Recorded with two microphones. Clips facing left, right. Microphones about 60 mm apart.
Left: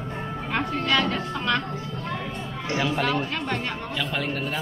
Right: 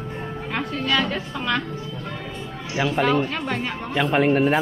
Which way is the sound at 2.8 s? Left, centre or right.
Centre.